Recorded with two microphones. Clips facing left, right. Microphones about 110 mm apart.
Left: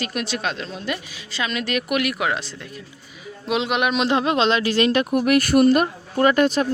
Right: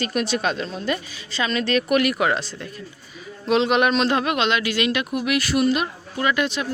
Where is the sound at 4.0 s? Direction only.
20° left (ahead or behind); by 6.7 s 40° left (ahead or behind).